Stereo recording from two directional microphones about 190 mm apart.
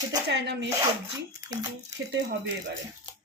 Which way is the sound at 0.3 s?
65° right (ahead or behind).